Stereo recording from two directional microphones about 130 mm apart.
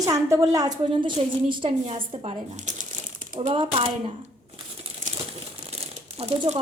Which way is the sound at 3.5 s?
45° right (ahead or behind).